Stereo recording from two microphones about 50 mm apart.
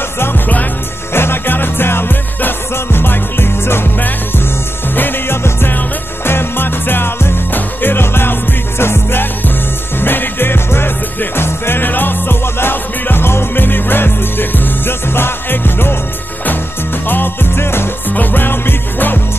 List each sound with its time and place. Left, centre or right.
0.2 s music: left
1.1 s music: left
4.9 s music: left
17.1 s music: left
18.1 s music: left